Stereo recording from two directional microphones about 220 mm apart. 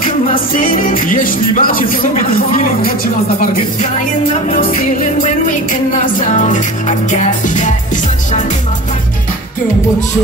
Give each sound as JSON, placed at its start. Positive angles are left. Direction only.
{"t": 0.3, "sound": "music", "side_deg": 40}
{"t": 5.2, "sound": "music", "side_deg": 35}